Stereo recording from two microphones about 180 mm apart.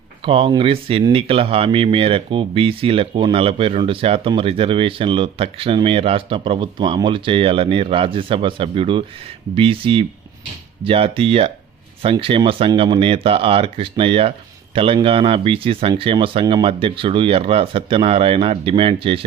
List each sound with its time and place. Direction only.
0.3 s speech: 30° right (ahead or behind)